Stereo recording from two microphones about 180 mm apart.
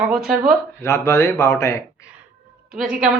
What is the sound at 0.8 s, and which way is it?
Speech, 15° left (ahead or behind).